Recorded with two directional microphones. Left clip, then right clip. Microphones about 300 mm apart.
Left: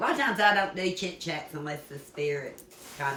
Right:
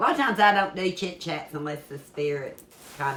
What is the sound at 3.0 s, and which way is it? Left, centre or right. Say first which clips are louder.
Speech: right 3 dB; centre.